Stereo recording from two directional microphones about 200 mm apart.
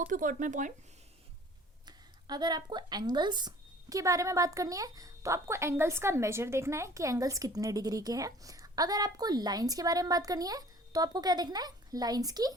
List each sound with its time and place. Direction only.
0.0 s speech: 40° right (ahead or behind)
2.2 s a woman's voice: 20° right (ahead or behind)